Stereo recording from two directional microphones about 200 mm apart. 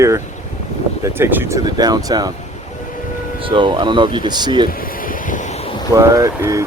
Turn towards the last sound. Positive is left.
turn(degrees=-15)  # may be behind; listen again after turning